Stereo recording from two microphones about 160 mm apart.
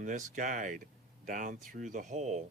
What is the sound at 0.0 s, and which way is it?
Speech, 55° right (ahead or behind).